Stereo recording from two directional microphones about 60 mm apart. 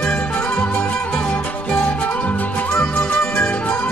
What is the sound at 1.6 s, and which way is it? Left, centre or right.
Music, centre.